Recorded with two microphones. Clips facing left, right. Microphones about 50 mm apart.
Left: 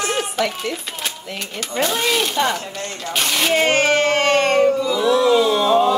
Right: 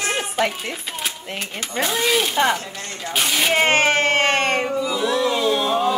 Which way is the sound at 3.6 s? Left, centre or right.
Right.